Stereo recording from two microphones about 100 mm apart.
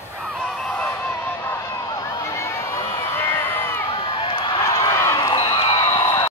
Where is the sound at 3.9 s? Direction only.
60° left (ahead or behind).